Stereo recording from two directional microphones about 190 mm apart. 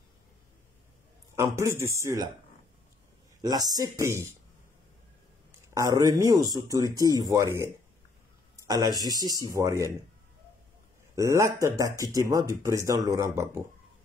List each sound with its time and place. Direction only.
1.3 s speech: 15° right (ahead or behind)
3.4 s speech: 20° right (ahead or behind)
5.8 s speech: 20° right (ahead or behind)
11.1 s speech: 15° right (ahead or behind)